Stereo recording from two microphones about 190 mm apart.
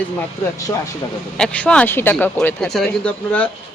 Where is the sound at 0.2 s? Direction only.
15° left (ahead or behind).